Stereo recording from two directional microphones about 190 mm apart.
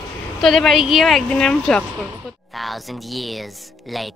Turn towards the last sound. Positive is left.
turn(degrees=0)  # may be behind; listen again after turning